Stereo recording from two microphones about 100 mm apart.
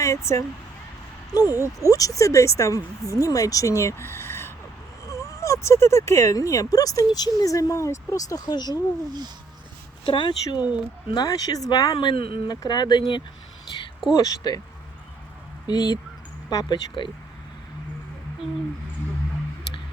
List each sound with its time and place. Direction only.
0.0 s speech: 30° left (ahead or behind)
10.1 s speech: 55° left (ahead or behind)
11.1 s speech: 40° left (ahead or behind)
11.9 s speech: 65° left (ahead or behind)
12.5 s speech: 45° left (ahead or behind)
14.2 s speech: 40° left (ahead or behind)
15.6 s speech: 45° left (ahead or behind)